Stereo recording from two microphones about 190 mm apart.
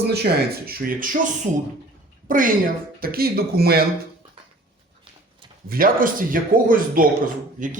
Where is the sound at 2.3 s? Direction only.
45° right (ahead or behind).